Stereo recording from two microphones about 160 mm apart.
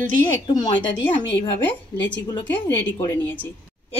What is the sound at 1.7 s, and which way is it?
Speech, 10° left (ahead or behind).